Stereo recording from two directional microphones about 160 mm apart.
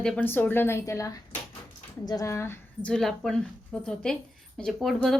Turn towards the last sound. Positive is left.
turn(degrees=0)  # may be behind; listen again after turning